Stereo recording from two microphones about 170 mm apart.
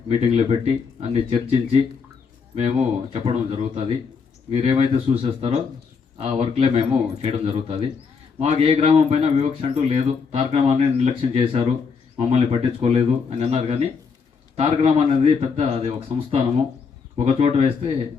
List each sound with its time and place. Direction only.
0.1 s a man's voice: 40° right (ahead or behind)
17.2 s a man's voice: 35° right (ahead or behind)